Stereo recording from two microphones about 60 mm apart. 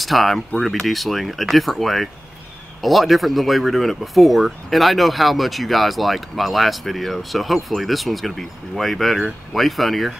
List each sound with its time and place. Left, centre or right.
0.0 s speech: centre